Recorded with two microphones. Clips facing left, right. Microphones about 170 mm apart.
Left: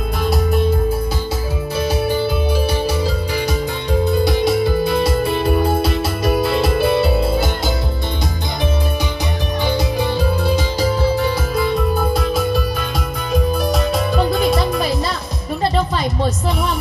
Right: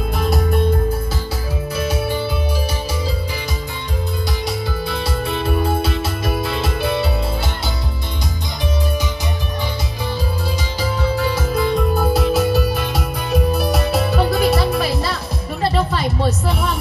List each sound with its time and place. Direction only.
0.2 s music: centre (ahead or behind)
1.8 s music: 35° left (ahead or behind)
4.2 s music: 60° left (ahead or behind); by 7.4 s 35° left (ahead or behind)
9.7 s music: 65° left (ahead or behind)
11.5 s music: 5° left (ahead or behind)